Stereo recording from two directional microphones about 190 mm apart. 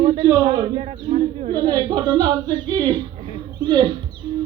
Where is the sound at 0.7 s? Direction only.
35° right (ahead or behind).